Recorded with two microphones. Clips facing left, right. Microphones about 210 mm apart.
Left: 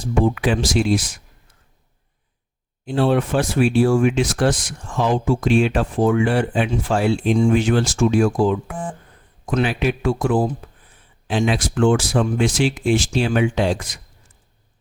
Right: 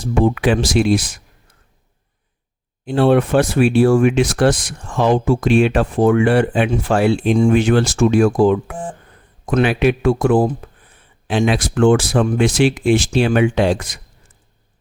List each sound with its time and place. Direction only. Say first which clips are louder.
0.1 s speech: right 3 dB; 65° right (ahead or behind)
2.8 s speech: right 4 dB; 60° right (ahead or behind)